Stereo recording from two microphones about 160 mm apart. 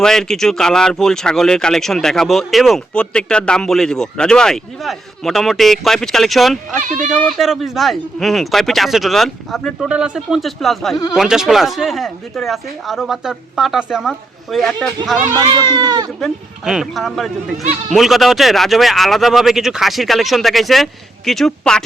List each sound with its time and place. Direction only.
0.0 s speech: 5° left (ahead or behind)
6.8 s speech: 55° right (ahead or behind)
7.1 s speech: centre (ahead or behind)
10.9 s speech: 25° left (ahead or behind)
11.2 s speech: 5° right (ahead or behind)
15.4 s speech: 30° right (ahead or behind)
16.2 s speech: centre (ahead or behind)